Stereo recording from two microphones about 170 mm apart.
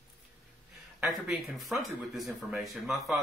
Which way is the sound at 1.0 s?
Centre (ahead or behind).